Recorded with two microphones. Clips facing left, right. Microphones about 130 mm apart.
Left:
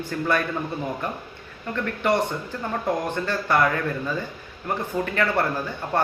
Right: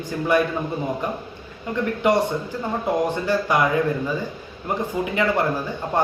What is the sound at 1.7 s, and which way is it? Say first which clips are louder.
Speech: right 3 dB; 15° right (ahead or behind).